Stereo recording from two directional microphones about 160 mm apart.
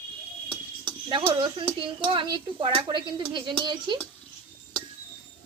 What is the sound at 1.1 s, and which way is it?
Speech, 30° right (ahead or behind).